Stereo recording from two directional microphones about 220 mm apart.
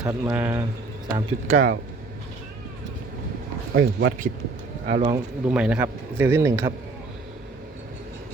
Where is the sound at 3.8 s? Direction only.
65° right (ahead or behind).